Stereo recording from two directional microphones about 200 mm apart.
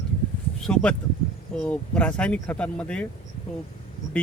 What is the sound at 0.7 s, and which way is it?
Speech, 5° left (ahead or behind).